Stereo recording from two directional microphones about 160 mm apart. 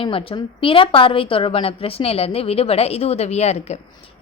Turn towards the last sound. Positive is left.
turn(degrees=45)  # may be behind; listen again after turning